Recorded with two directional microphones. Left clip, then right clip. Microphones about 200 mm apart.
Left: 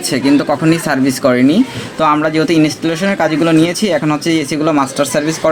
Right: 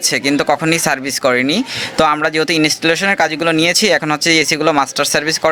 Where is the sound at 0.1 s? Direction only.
25° right (ahead or behind).